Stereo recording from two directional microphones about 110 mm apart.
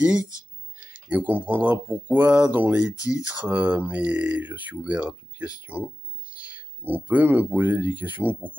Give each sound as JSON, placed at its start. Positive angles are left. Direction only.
{"t": 0.7, "sound": "speech", "side_deg": -15}